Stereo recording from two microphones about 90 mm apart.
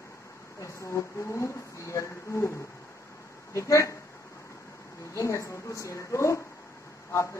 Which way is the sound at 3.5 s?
35° left (ahead or behind).